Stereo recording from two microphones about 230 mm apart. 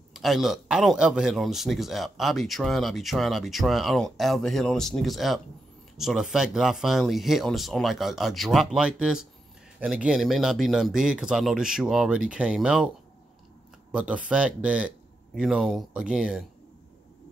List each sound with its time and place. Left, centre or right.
0.1 s speech: centre
13.9 s speech: centre